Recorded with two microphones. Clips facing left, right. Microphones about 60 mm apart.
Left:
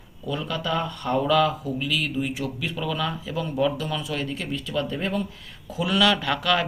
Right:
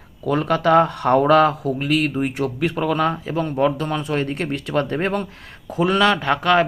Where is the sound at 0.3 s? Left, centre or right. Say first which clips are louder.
Right 10 dB; right.